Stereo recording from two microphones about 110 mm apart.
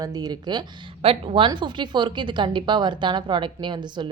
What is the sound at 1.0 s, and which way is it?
Speech, 60° right (ahead or behind).